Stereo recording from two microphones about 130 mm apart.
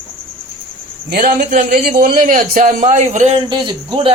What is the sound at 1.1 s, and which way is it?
A man's voice, 90° right.